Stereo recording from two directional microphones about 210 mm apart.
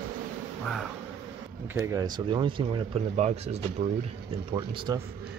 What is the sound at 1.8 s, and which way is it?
Speech, 15° right (ahead or behind).